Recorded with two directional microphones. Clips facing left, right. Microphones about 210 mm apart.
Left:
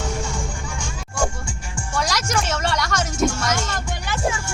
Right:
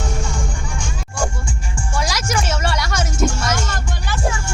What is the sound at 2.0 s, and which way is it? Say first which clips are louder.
Music: right 1 dB; 5° right (ahead or behind).